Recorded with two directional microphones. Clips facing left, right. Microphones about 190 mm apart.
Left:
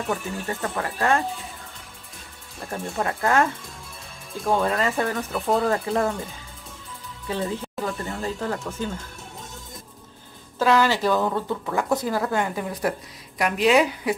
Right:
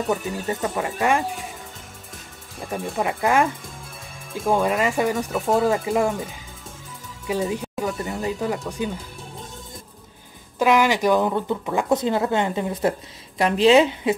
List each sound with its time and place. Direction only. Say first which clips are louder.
0.1 s speech: right 3 dB; 20° right (ahead or behind)
3.0 s speech: right 1 dB; 15° right (ahead or behind)
4.6 s speech: right 2 dB; 15° right (ahead or behind)
5.3 s speech: even; centre (ahead or behind)
5.7 s speech: right 2 dB; 15° right (ahead or behind)
7.2 s speech: right 3 dB; 15° right (ahead or behind)
10.6 s speech: right 2 dB; 15° right (ahead or behind)